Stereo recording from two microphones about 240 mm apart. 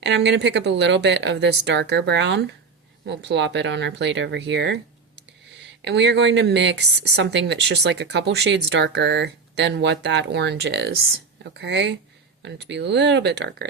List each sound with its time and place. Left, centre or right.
0.0 s a woman's voice: right
5.8 s a woman's voice: right